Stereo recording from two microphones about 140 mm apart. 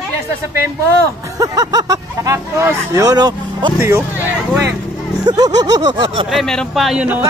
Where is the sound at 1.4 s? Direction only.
25° right (ahead or behind).